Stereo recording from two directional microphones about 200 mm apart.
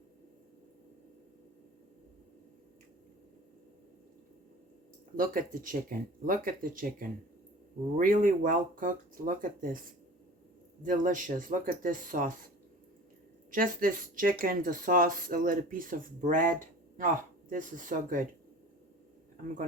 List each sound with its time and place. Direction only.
5.1 s speech: 45° right (ahead or behind)
10.8 s speech: 40° right (ahead or behind)
13.5 s speech: 45° right (ahead or behind)